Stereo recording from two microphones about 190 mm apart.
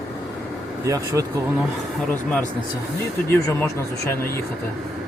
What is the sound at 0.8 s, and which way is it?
Speech, 15° right (ahead or behind).